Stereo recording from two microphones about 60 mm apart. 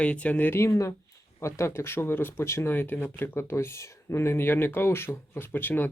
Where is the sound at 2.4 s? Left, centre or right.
Left.